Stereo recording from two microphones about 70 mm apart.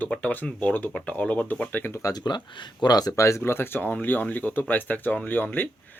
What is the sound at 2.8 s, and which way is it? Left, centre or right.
Speech, left.